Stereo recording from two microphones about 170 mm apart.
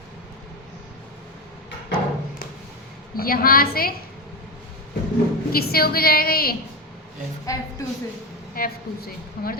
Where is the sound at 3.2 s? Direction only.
60° left (ahead or behind).